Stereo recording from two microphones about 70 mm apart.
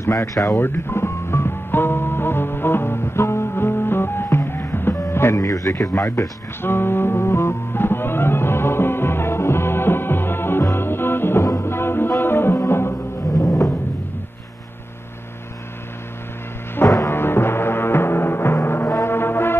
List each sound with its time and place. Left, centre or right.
0.0 s speech: left
0.6 s music: left
13.3 s music: left
16.8 s music: left
17.1 s music: left